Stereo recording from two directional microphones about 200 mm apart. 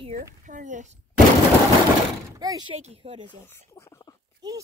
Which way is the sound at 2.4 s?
20° right (ahead or behind).